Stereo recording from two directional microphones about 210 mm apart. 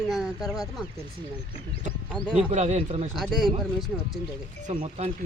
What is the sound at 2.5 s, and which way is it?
Speech, 35° right (ahead or behind).